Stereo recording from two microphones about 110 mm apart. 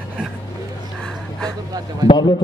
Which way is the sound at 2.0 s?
35° right (ahead or behind).